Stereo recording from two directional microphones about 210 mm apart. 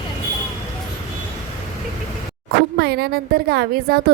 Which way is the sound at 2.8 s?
50° right (ahead or behind).